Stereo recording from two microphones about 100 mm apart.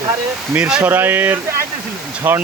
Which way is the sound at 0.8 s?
20° right (ahead or behind).